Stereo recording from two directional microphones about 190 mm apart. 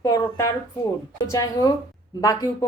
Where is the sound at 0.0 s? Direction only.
20° left (ahead or behind).